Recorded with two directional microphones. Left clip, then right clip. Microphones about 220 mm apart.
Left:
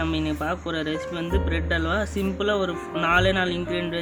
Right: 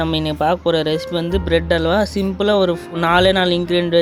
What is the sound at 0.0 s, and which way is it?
Speech, 30° right (ahead or behind).